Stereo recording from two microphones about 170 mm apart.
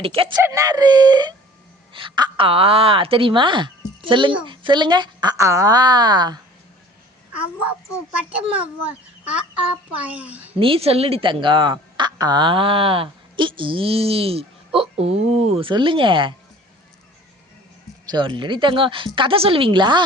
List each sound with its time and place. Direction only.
0.0 s speech: 35° right (ahead or behind)
0.4 s a woman's voice: 20° right (ahead or behind)
9.2 s speech: 5° right (ahead or behind)
10.6 s speech: 35° right (ahead or behind)
18.0 s a woman's voice: 25° right (ahead or behind)